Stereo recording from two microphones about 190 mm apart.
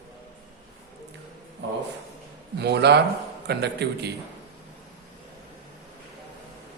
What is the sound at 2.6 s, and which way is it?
A man's voice, 60° right (ahead or behind).